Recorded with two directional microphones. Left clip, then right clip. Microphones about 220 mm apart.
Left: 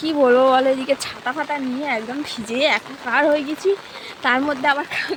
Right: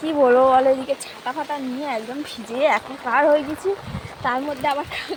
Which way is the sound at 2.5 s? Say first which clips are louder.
Even; 30° left (ahead or behind).